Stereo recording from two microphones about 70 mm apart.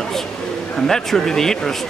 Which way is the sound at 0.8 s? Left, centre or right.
Centre.